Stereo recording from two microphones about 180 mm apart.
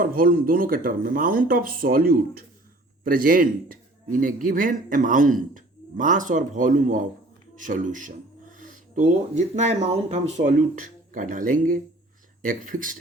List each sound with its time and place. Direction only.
0.0 s speech: 50° right (ahead or behind)